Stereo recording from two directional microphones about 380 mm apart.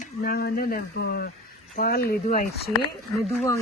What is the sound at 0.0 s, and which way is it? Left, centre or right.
Speech, left.